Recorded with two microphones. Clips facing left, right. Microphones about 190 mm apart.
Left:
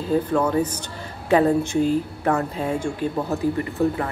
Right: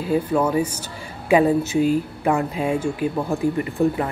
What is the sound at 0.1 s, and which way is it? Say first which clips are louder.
Speech: right 1 dB; 10° right (ahead or behind).